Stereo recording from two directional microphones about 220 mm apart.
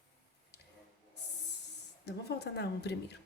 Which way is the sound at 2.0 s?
50° left (ahead or behind).